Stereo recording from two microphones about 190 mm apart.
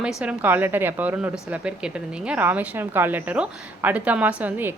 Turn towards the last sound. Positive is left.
turn(degrees=-10)  # may be behind; listen again after turning